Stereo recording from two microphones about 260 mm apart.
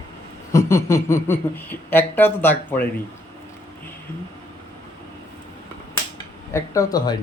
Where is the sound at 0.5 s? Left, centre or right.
Centre.